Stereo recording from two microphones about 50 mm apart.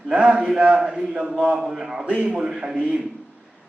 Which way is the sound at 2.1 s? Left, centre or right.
Centre.